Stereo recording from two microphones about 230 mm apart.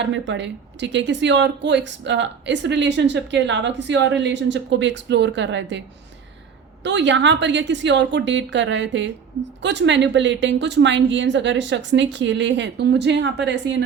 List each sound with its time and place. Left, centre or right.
0.0 s a woman's voice: right
6.8 s a woman's voice: right